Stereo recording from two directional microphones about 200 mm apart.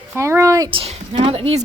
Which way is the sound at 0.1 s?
15° right (ahead or behind).